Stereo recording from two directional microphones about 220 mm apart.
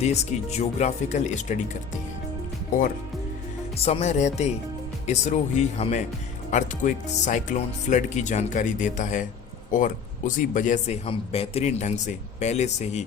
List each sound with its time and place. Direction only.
0.0 s a man's voice: 30° left (ahead or behind)
3.8 s a man's voice: 25° left (ahead or behind)